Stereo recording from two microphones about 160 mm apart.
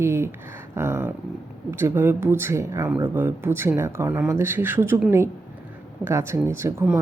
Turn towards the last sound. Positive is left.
turn(degrees=-15)  # may be behind; listen again after turning